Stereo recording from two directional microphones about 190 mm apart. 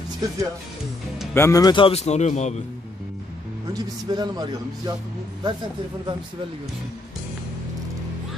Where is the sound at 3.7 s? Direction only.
20° right (ahead or behind).